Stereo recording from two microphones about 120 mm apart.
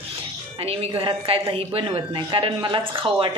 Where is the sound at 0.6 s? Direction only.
55° right (ahead or behind).